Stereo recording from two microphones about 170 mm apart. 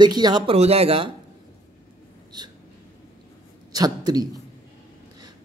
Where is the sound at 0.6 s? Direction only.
35° right (ahead or behind).